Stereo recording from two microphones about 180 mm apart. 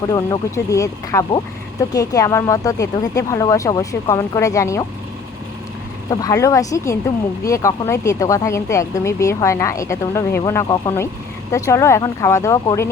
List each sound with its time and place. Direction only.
0.1 s speech: 20° left (ahead or behind)
6.1 s speech: 20° left (ahead or behind)